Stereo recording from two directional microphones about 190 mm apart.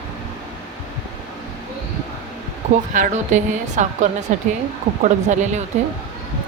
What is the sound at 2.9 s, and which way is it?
Speech, 40° right (ahead or behind).